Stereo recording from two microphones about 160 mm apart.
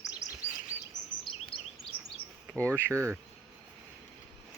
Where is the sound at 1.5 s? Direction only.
35° left (ahead or behind).